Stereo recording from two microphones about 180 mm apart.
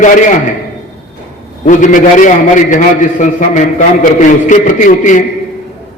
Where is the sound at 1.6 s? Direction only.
45° left (ahead or behind).